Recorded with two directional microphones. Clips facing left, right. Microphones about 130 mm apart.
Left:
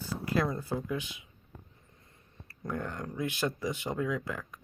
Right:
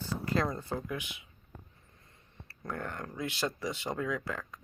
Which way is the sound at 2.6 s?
15° left (ahead or behind).